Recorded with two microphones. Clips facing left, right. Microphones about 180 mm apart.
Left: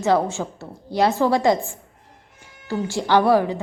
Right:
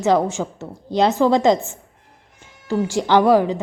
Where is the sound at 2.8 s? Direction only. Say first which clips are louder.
Right 2 dB; 15° right (ahead or behind).